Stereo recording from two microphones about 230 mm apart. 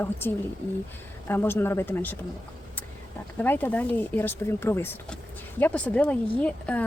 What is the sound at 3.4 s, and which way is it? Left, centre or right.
Speech, centre.